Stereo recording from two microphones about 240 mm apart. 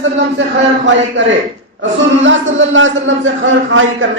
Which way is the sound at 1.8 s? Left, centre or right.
Right.